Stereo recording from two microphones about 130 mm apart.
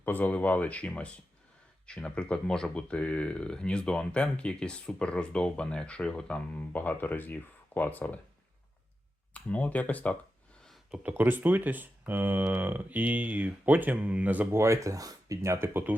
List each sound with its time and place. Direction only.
0.0 s speech: 15° left (ahead or behind)
9.3 s speech: 10° left (ahead or behind)
10.7 s a sound: 5° right (ahead or behind)
11.1 s speech: 15° right (ahead or behind)